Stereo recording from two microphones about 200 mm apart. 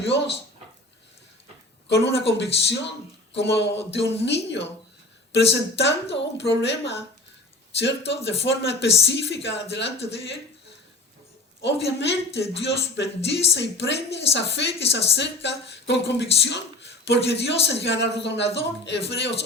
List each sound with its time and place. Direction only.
0.0 s a woman's voice: 60° left (ahead or behind)
1.9 s a woman's voice: 60° left (ahead or behind)
11.6 s a woman's voice: 60° left (ahead or behind)